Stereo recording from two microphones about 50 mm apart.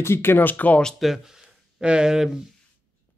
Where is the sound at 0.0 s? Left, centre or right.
Left.